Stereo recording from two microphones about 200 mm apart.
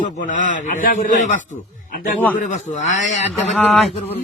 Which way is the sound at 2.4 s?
35° left (ahead or behind).